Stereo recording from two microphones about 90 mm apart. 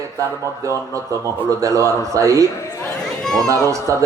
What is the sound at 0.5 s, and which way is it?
Speech, 35° right (ahead or behind).